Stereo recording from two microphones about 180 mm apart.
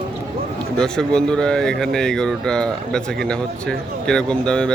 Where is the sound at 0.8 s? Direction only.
5° left (ahead or behind).